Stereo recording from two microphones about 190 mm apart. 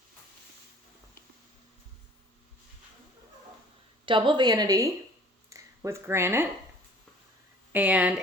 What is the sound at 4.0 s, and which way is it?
A woman's voice, 25° right (ahead or behind).